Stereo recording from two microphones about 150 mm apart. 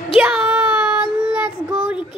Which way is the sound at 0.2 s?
5° right (ahead or behind).